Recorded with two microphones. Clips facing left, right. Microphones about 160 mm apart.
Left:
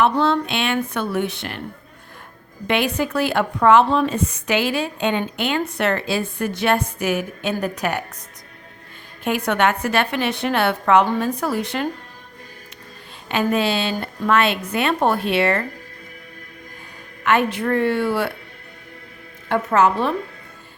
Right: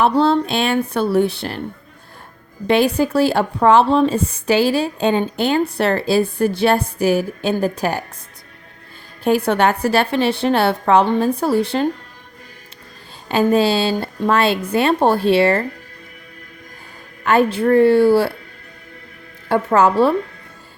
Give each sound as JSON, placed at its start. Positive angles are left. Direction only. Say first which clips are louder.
{"t": 0.0, "sound": "a woman's voice", "louder": "right 3 dB", "side_deg": -35}
{"t": 2.6, "sound": "a woman's voice", "louder": "right 6 dB", "side_deg": -35}
{"t": 9.2, "sound": "a woman's voice", "louder": "right 4 dB", "side_deg": -35}
{"t": 13.2, "sound": "a woman's voice", "louder": "right 5 dB", "side_deg": -35}
{"t": 17.2, "sound": "a woman's voice", "louder": "right 4 dB", "side_deg": -30}
{"t": 19.5, "sound": "a woman's voice", "louder": "right 3 dB", "side_deg": -30}